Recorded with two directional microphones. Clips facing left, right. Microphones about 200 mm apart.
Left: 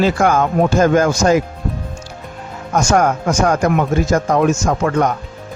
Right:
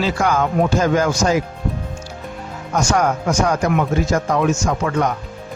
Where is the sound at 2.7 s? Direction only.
50° left (ahead or behind).